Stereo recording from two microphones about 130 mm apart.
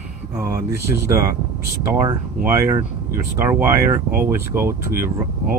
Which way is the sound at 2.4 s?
20° right (ahead or behind).